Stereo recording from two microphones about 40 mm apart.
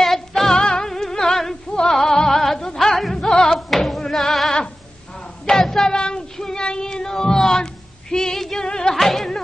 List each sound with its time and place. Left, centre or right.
0.0 s music: centre
3.5 s music: centre
5.4 s child singing: centre
8.6 s music: centre
8.9 s music: centre